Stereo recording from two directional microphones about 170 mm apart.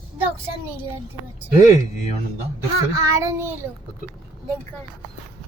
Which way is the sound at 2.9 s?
20° right (ahead or behind).